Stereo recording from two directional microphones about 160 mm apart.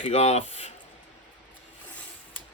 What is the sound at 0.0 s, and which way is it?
Speech, 40° left (ahead or behind).